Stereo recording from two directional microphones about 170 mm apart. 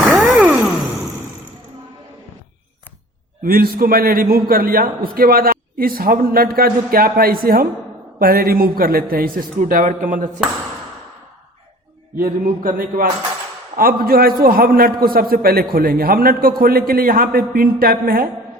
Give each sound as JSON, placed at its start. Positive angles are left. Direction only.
{"t": 0.0, "sound": "a sound", "side_deg": 0}
{"t": 3.4, "sound": "a man's voice", "side_deg": -60}
{"t": 12.1, "sound": "a man's voice", "side_deg": -55}